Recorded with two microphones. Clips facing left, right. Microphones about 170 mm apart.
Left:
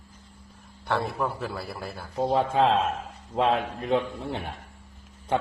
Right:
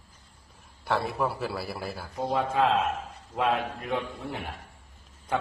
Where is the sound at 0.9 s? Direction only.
5° right (ahead or behind).